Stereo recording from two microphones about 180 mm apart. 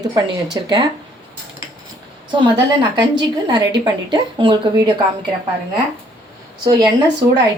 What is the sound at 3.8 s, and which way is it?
A woman's voice, 25° right (ahead or behind).